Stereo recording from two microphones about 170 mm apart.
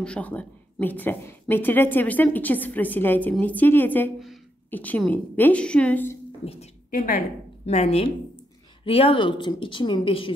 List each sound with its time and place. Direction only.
0.0 s a woman's voice: 5° left (ahead or behind)
6.4 s a woman's voice: 35° left (ahead or behind)
6.9 s a woman's voice: 55° left (ahead or behind)
7.6 s a woman's voice: 40° left (ahead or behind)